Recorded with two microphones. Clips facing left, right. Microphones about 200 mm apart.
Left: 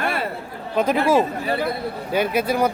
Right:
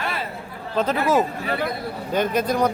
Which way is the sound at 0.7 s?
10° left (ahead or behind).